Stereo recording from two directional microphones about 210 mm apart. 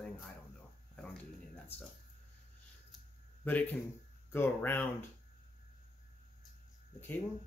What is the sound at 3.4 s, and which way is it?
Speech, 10° left (ahead or behind).